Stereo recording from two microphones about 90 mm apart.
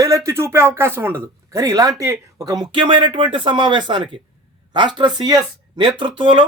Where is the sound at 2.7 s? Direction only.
65° right (ahead or behind).